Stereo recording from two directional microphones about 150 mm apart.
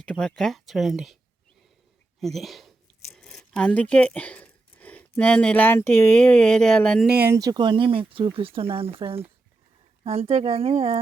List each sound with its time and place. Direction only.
0.0 s speech: 5° left (ahead or behind)
2.2 s speech: centre (ahead or behind)
7.1 s speech: 10° right (ahead or behind)
7.3 s speech: 25° right (ahead or behind); by 11.0 s 40° right (ahead or behind)